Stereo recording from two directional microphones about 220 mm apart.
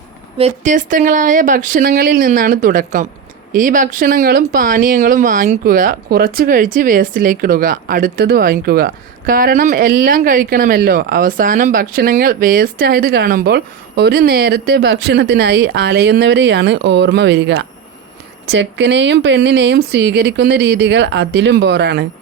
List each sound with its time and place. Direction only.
0.3 s speech: 30° right (ahead or behind); by 22.0 s 50° right (ahead or behind)